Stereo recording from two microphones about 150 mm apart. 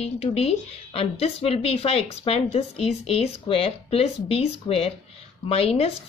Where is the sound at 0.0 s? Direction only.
45° left (ahead or behind).